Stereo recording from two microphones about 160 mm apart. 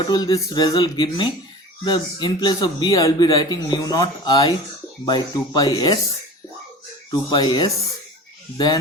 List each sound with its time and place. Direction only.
0.1 s a man's voice: 25° left (ahead or behind)
7.1 s a man's voice: 25° left (ahead or behind)